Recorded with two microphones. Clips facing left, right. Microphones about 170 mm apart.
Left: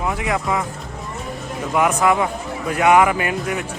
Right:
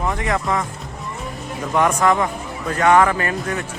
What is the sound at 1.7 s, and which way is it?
Speech, 10° left (ahead or behind).